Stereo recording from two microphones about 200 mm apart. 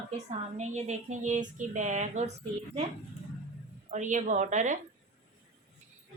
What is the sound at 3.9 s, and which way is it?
Speech, 40° right (ahead or behind).